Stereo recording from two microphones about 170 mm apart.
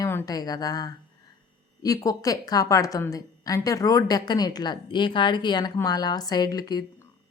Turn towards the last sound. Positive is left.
turn(degrees=25)  # may be behind; listen again after turning